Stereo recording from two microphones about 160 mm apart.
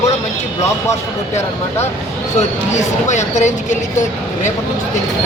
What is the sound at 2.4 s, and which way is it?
Speech, 45° left (ahead or behind).